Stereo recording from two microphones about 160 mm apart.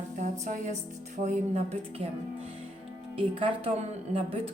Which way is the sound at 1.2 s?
45° right (ahead or behind).